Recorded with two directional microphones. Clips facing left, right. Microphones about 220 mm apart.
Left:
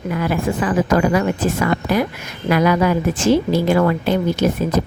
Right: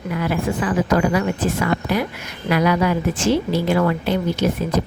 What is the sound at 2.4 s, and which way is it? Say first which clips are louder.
A woman's voice: left 2 dB; 45° left (ahead or behind).